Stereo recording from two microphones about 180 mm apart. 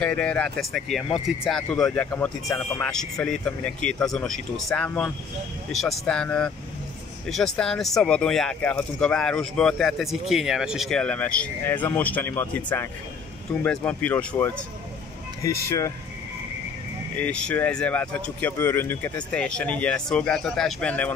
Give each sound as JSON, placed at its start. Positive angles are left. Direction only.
{"t": 0.0, "sound": "speech", "side_deg": 5}
{"t": 2.0, "sound": "speech", "side_deg": 15}
{"t": 2.8, "sound": "speech", "side_deg": 5}
{"t": 17.2, "sound": "speech", "side_deg": 5}